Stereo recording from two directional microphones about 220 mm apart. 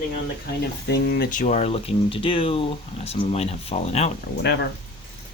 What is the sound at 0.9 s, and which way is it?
Speech, 45° left (ahead or behind).